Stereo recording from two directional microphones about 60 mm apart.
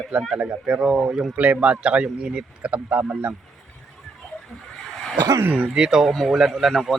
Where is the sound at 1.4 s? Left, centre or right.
Right.